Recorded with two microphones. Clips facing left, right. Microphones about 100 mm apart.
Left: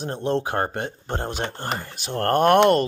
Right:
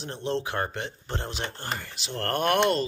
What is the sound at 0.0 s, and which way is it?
Speech, 50° left (ahead or behind).